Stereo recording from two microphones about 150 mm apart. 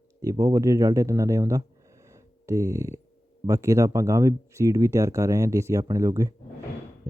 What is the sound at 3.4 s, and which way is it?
Speech, 20° right (ahead or behind).